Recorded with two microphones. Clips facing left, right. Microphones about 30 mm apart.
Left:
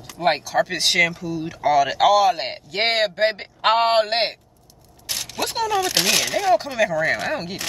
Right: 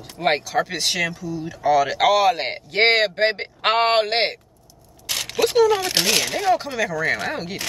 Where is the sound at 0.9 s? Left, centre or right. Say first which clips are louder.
Left 5 dB; left.